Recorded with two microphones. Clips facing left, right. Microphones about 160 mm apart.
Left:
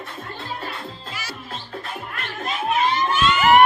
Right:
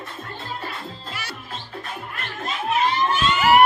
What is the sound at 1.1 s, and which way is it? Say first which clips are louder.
Music: right 1 dB; 60° right (ahead or behind).